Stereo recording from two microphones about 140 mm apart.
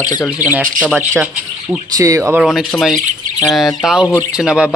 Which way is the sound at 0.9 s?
15° right (ahead or behind).